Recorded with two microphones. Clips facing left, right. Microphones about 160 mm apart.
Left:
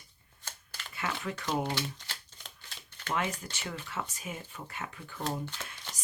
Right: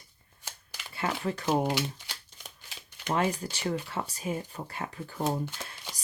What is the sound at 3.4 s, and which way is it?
Speech, 35° right (ahead or behind).